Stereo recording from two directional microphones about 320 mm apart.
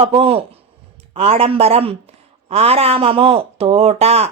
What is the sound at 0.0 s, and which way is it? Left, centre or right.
A man's voice, centre.